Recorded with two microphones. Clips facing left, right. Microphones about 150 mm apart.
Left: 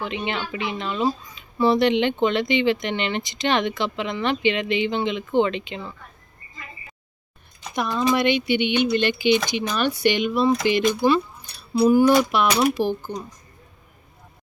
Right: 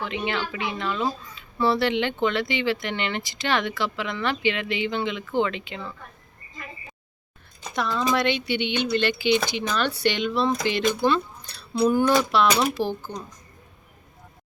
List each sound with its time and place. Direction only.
0.0 s speech: 20° left (ahead or behind)
7.8 s speech: 15° left (ahead or behind)